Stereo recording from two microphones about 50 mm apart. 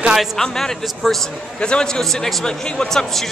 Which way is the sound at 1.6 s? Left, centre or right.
Centre.